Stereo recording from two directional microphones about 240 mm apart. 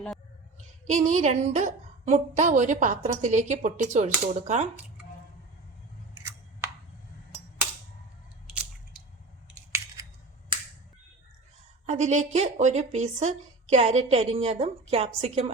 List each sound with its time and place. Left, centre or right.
0.9 s a woman's voice: right
11.9 s a woman's voice: right